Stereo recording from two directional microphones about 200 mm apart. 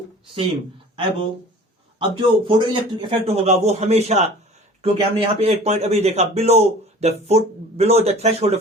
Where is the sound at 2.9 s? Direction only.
25° right (ahead or behind).